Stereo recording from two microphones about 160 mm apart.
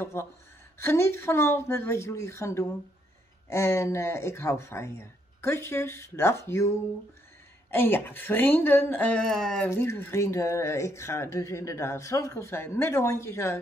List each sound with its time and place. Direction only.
0.0 s speech: 15° left (ahead or behind)
7.7 s speech: 15° left (ahead or behind)
9.7 s speech: 15° left (ahead or behind)